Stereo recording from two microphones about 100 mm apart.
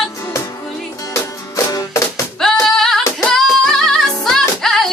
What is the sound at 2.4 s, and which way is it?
Singing, 5° left (ahead or behind).